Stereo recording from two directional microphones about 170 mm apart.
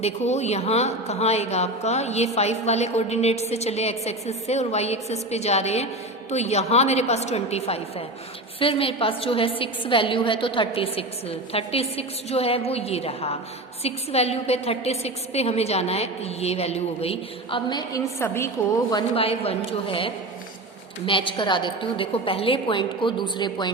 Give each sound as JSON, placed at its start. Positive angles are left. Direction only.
{"t": 0.0, "sound": "a woman's voice", "side_deg": 40}
{"t": 19.1, "sound": "a woman's voice", "side_deg": 35}